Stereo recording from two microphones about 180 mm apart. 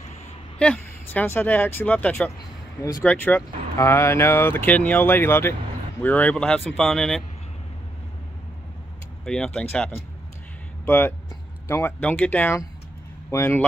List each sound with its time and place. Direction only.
0.6 s speech: 10° left (ahead or behind)
9.2 s speech: 5° left (ahead or behind)